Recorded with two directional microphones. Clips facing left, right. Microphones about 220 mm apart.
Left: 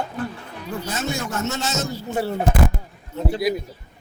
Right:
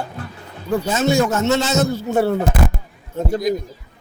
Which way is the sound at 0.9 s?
90° right.